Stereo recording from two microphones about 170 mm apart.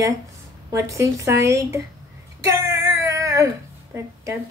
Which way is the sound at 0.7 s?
20° right (ahead or behind).